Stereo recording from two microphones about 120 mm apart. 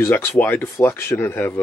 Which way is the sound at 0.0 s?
15° left (ahead or behind).